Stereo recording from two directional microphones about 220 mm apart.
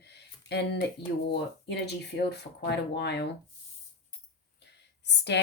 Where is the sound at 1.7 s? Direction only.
50° left (ahead or behind).